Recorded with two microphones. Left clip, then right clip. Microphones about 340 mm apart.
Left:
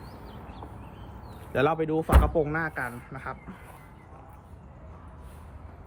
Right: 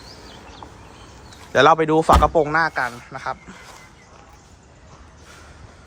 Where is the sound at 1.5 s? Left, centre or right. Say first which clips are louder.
Right 11 dB; centre.